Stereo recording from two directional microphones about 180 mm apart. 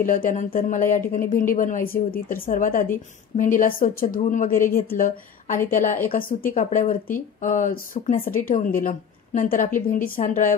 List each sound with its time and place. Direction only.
0.0 s speech: 50° left (ahead or behind)